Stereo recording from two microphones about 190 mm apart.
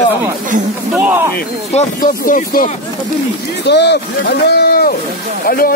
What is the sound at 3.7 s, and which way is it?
Speech, 60° left (ahead or behind).